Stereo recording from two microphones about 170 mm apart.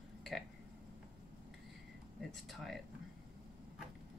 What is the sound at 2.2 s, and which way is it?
Speech, centre (ahead or behind).